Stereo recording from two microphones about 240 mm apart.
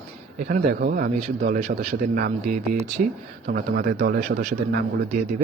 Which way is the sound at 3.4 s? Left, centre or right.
Right.